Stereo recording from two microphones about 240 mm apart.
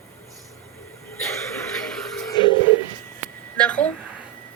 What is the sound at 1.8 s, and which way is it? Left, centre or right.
Music, centre.